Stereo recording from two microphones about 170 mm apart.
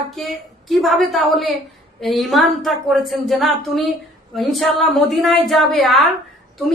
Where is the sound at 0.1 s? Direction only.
Centre (ahead or behind).